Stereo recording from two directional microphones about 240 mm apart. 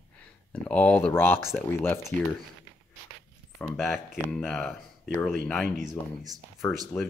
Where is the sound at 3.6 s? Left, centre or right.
Centre.